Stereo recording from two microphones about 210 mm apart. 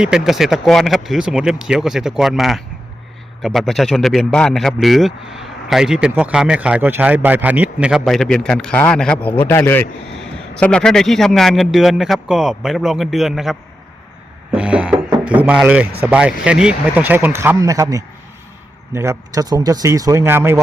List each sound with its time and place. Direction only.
0.0 s a man's voice: centre (ahead or behind)